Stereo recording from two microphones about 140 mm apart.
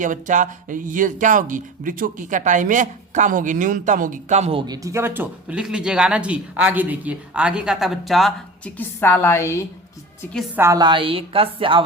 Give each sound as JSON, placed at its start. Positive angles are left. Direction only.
{"t": 0.0, "sound": "speech", "side_deg": -65}
{"t": 4.6, "sound": "speech", "side_deg": -25}
{"t": 8.8, "sound": "a woman's voice", "side_deg": 15}
{"t": 10.5, "sound": "speech", "side_deg": -15}
{"t": 10.8, "sound": "a woman's voice", "side_deg": -35}